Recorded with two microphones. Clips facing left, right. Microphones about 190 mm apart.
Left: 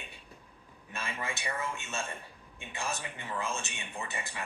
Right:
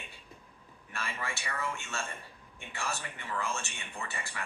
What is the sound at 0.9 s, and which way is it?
Speech, 20° left (ahead or behind).